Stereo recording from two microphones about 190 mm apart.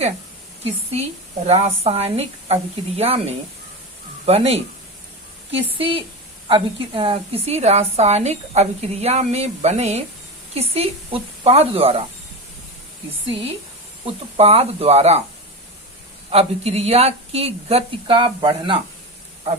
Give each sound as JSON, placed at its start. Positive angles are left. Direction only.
{"t": 1.5, "sound": "a woman's voice", "side_deg": -35}
{"t": 13.2, "sound": "a woman's voice", "side_deg": -30}
{"t": 16.3, "sound": "a woman's voice", "side_deg": -35}